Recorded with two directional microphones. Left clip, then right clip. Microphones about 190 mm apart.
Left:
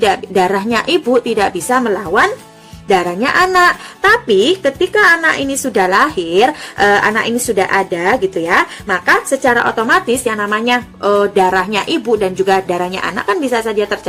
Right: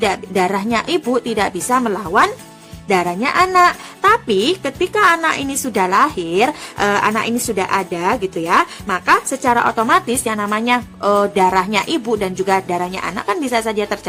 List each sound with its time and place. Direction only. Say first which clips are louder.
0.0 s a woman's voice: left 4 dB; 30° right (ahead or behind)